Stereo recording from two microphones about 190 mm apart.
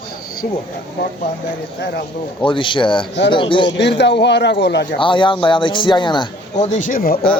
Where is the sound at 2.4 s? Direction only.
25° left (ahead or behind).